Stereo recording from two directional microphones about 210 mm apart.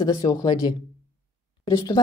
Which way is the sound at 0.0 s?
20° left (ahead or behind).